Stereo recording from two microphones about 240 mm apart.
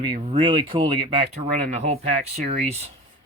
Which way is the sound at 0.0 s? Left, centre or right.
Right.